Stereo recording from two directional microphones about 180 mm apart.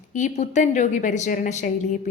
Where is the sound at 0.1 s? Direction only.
40° left (ahead or behind).